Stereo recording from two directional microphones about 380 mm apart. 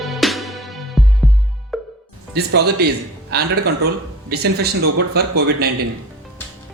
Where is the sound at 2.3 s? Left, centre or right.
Right.